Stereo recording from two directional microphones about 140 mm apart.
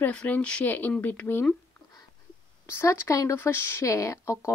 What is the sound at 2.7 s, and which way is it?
Speech, 20° left (ahead or behind).